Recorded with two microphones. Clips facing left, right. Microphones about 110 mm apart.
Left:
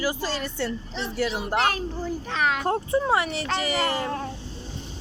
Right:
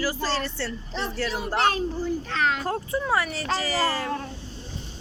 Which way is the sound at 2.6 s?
25° left (ahead or behind).